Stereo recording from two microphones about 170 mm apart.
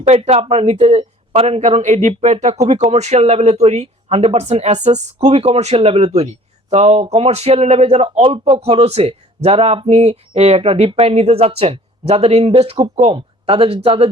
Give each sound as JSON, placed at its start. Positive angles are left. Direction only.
{"t": 0.1, "sound": "speech", "side_deg": -35}